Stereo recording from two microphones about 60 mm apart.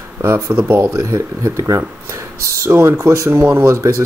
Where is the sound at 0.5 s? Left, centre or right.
Right.